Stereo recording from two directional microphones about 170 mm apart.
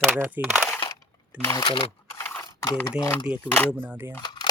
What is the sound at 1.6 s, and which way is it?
Speech, 30° left (ahead or behind).